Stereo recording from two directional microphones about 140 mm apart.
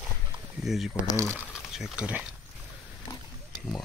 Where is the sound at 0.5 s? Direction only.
Centre (ahead or behind).